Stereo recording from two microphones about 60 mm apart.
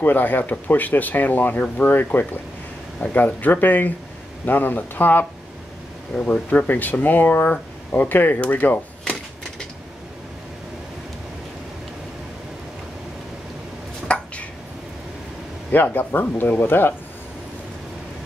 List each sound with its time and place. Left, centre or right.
0.0 s speech: left
14.0 s a sound: centre
15.7 s speech: left